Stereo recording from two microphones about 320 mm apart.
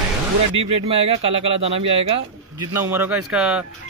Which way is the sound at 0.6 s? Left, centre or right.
Centre.